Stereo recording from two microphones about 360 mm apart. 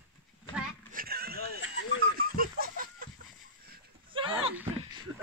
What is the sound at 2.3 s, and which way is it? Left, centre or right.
Chicken, right.